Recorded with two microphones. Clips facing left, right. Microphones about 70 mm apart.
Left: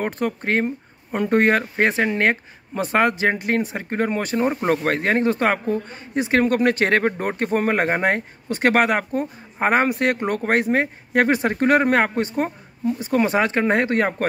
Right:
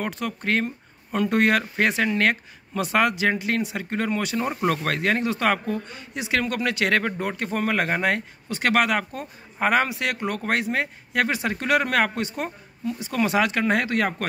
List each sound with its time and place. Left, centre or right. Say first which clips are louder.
0.0 s speech: left 4 dB; left